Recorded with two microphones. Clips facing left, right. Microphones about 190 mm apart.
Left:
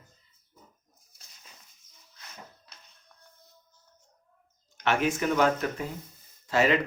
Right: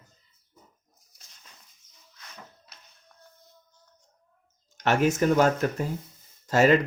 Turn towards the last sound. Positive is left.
turn(degrees=-45)  # may be behind; listen again after turning